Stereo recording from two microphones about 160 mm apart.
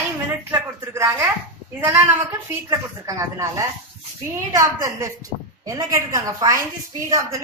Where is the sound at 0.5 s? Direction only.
15° right (ahead or behind).